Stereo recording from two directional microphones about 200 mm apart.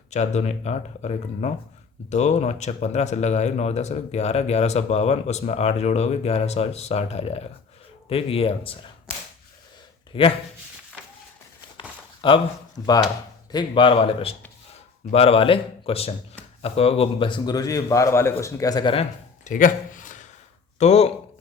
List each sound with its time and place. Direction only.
0.1 s a man's voice: 35° left (ahead or behind)
10.1 s speech: 25° left (ahead or behind)
11.8 s a sound: 25° left (ahead or behind)
13.5 s a man's voice: 25° left (ahead or behind)
19.5 s a sound: 40° left (ahead or behind)
20.7 s speech: 35° left (ahead or behind)